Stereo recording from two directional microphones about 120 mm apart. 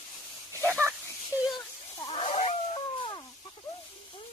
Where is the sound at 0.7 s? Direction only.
20° right (ahead or behind).